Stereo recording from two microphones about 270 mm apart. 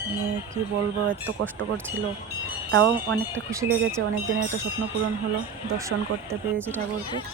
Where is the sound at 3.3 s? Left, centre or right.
Centre.